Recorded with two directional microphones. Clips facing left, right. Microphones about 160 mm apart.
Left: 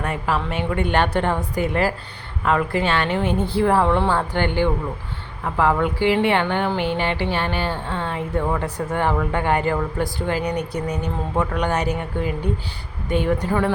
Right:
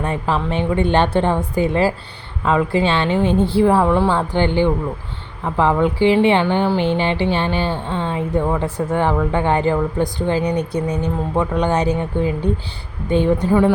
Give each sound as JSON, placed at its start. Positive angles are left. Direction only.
{"t": 0.0, "sound": "speech", "side_deg": -25}